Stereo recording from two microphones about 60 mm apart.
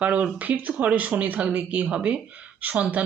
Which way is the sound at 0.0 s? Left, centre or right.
Right.